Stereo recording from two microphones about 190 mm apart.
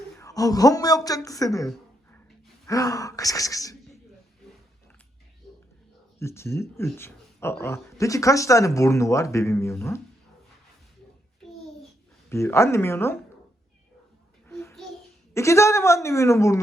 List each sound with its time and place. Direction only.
0.2 s speech: 20° left (ahead or behind)
6.1 s speech: 15° left (ahead or behind)
12.3 s speech: 15° left (ahead or behind)
14.4 s a sound: 15° left (ahead or behind)
15.3 s speech: 15° left (ahead or behind)